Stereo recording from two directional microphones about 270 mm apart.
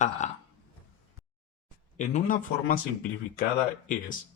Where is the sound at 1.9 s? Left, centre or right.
Left.